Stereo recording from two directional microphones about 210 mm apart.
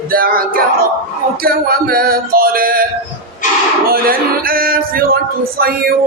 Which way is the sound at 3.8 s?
45° right (ahead or behind).